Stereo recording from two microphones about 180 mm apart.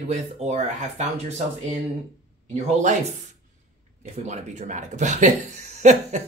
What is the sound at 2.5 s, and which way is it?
Speech, 40° right (ahead or behind).